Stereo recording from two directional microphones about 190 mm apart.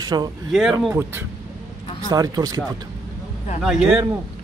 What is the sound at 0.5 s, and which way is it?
Speech, centre (ahead or behind).